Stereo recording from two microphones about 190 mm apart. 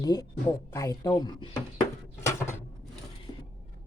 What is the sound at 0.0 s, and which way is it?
Speech, 20° left (ahead or behind).